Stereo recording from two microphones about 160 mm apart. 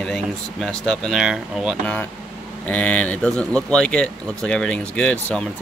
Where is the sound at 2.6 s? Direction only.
10° left (ahead or behind).